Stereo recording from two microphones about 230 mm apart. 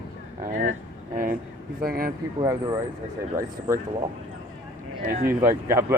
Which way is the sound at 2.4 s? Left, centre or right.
Centre.